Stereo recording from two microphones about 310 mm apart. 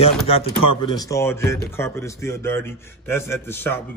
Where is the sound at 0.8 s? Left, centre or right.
Centre.